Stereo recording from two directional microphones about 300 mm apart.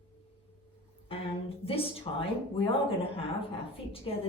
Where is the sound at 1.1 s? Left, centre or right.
Centre.